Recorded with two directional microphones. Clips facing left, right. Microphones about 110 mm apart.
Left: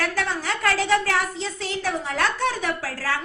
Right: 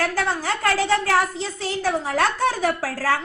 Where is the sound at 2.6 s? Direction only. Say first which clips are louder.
Right 5 dB; 40° right (ahead or behind).